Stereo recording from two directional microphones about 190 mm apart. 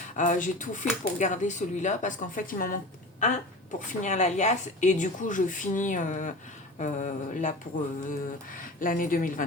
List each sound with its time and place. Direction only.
0.2 s speech: 40° left (ahead or behind)
8.5 s speech: 45° left (ahead or behind)